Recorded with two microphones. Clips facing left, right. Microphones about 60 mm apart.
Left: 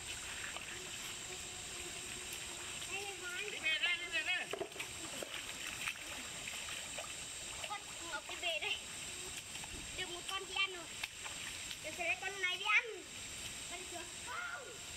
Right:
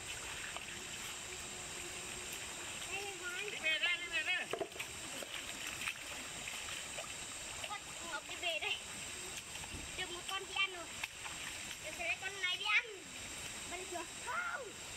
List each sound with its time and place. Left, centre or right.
2.9 s a sound: centre
7.6 s splash: centre
9.9 s speech: centre
12.0 s a child's voice: centre
13.9 s speech: right